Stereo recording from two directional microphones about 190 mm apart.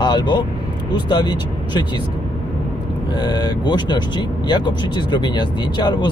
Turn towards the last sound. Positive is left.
turn(degrees=25)  # may be behind; listen again after turning